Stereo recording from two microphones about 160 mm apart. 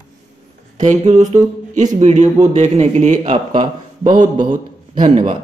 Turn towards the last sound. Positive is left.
turn(degrees=-35)  # may be behind; listen again after turning